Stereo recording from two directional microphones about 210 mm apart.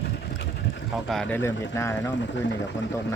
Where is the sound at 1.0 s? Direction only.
Centre (ahead or behind).